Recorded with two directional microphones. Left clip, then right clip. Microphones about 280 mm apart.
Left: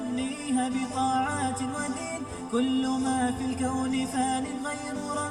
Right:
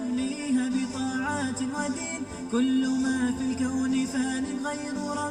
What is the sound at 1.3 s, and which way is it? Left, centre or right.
Music, centre.